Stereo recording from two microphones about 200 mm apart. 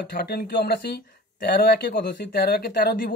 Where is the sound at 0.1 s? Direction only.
50° left (ahead or behind).